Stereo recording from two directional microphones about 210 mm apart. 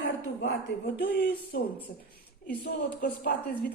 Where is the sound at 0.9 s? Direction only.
45° left (ahead or behind).